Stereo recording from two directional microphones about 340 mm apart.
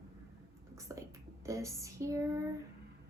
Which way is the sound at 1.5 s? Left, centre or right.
Centre.